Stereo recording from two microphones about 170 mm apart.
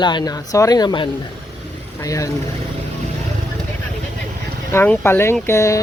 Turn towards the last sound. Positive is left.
turn(degrees=15)  # may be behind; listen again after turning